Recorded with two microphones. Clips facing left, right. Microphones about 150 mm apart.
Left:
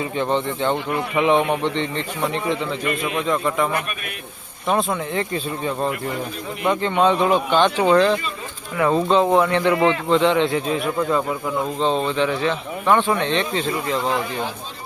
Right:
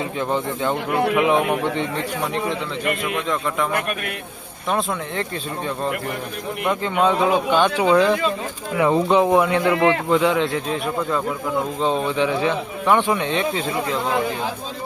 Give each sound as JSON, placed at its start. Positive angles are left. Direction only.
{"t": 0.0, "sound": "speech", "side_deg": -5}
{"t": 4.7, "sound": "speech", "side_deg": 0}
{"t": 11.8, "sound": "speech", "side_deg": -10}